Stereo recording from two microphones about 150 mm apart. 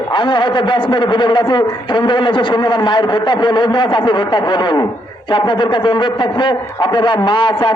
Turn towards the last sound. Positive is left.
turn(degrees=35)  # may be behind; listen again after turning